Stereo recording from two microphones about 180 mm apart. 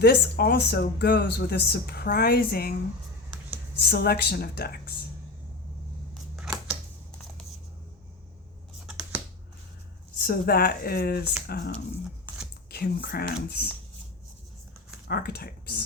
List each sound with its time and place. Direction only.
0.0 s speech: 60° left (ahead or behind)
3.8 s speech: 65° left (ahead or behind)
8.9 s scissors: 5° right (ahead or behind)
10.2 s speech: 60° left (ahead or behind)
12.7 s speech: 55° left (ahead or behind)
15.0 s speech: 60° left (ahead or behind)